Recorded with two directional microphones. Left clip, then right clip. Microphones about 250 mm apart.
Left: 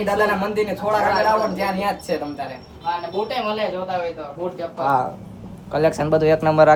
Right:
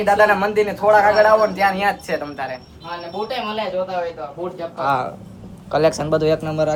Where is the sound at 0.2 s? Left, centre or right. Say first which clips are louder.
Right 5 dB; centre.